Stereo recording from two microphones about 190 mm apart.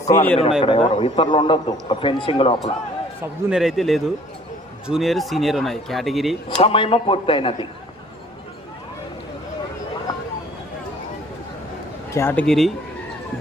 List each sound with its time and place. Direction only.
0.1 s speech: 10° left (ahead or behind)
0.6 s a man's voice: 25° left (ahead or behind)
3.5 s speech: centre (ahead or behind)
6.6 s a man's voice: 30° left (ahead or behind)
12.1 s speech: 10° left (ahead or behind)